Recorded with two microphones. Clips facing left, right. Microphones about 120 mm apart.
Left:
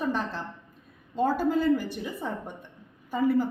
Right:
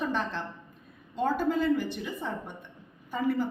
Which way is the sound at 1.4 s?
40° left (ahead or behind).